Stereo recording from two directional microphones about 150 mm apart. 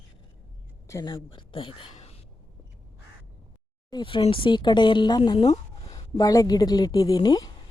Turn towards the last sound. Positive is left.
turn(degrees=25)  # may be behind; listen again after turning